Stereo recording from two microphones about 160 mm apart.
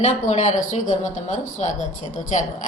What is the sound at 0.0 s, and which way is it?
Speech, 45° left (ahead or behind).